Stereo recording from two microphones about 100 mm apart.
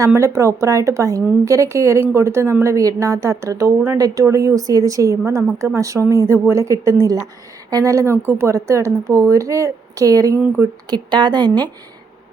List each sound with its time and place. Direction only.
0.0 s a woman's voice: 30° right (ahead or behind)
10.4 s speech: 15° right (ahead or behind)
10.8 s a woman's voice: 50° right (ahead or behind)